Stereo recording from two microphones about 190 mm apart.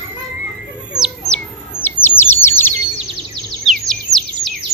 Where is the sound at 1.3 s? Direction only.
10° left (ahead or behind).